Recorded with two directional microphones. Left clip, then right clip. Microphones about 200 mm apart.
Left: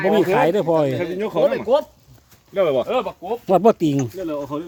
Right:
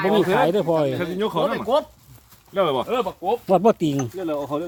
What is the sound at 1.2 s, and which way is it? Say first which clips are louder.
Speech: left 5 dB; 25° right (ahead or behind).